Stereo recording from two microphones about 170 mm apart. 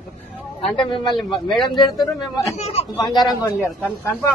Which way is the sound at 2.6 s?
35° left (ahead or behind).